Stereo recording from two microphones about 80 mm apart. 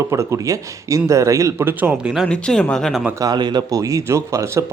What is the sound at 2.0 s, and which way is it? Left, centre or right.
Speech, centre.